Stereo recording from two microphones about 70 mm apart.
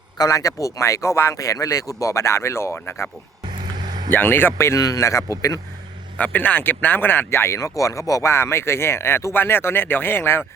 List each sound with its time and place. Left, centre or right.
0.2 s speech: left
3.6 s vehicle: right
4.1 s speech: left
4.8 s speech: left
6.1 s speech: left
8.3 s speech: left